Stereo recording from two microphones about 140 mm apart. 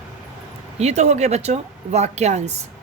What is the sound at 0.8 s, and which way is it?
A woman's voice, 50° right (ahead or behind).